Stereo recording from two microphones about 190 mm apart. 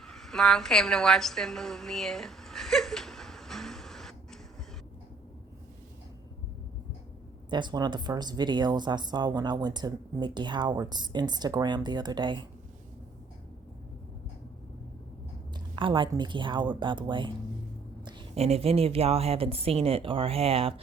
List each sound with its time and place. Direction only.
0.0 s a sound: centre (ahead or behind)
7.5 s speech: 20° right (ahead or behind)
15.7 s a woman's voice: 25° right (ahead or behind)